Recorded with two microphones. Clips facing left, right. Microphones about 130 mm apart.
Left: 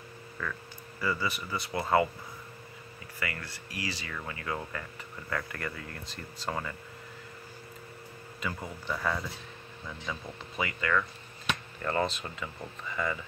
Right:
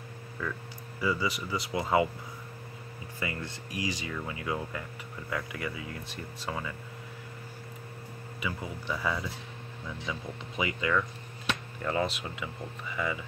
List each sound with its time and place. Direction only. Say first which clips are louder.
0.4 s speech: right 2 dB; 10° right (ahead or behind)
3.2 s speech: right 2 dB; 20° right (ahead or behind); by 6.6 s 5° right (ahead or behind)
8.8 s speech: even; 5° right (ahead or behind)
10.0 s speech: right 1 dB; 15° right (ahead or behind)